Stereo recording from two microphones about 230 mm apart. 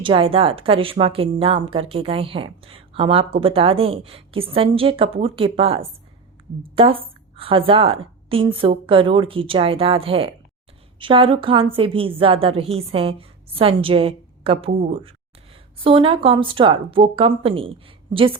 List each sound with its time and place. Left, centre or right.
0.0 s a woman's voice: right
15.8 s a woman's voice: right